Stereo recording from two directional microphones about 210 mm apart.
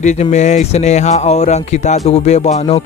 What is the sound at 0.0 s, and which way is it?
Speech, 35° left (ahead or behind).